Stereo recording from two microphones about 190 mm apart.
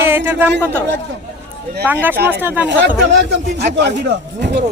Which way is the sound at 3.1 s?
65° right (ahead or behind).